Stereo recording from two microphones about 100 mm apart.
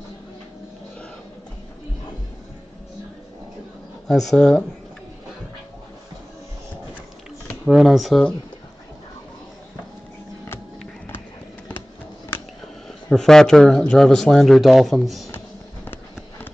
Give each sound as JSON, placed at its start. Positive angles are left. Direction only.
{"t": 4.1, "sound": "speech", "side_deg": 5}
{"t": 7.7, "sound": "speech", "side_deg": 0}
{"t": 13.1, "sound": "speech", "side_deg": 5}
{"t": 15.3, "sound": "a sound", "side_deg": 20}